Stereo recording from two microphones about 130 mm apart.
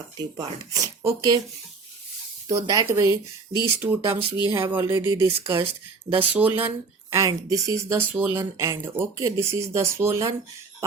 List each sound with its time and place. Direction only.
0.2 s speech: 30° right (ahead or behind)
2.5 s speech: 25° right (ahead or behind)
3.8 s speech: 15° right (ahead or behind)
7.1 s speech: 25° right (ahead or behind)